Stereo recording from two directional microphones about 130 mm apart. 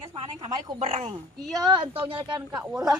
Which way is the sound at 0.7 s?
50° right (ahead or behind).